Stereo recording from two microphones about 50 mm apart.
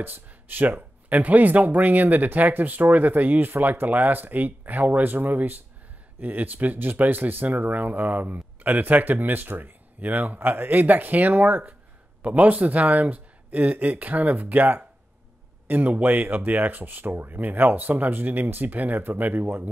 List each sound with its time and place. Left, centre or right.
0.0 s speech: right
12.2 s speech: right